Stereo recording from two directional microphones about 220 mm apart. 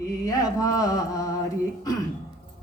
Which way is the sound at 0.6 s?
15° left (ahead or behind).